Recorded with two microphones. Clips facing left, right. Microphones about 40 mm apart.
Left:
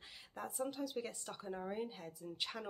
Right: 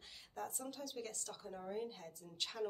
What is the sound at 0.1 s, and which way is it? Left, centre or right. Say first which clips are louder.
Speech: even; centre.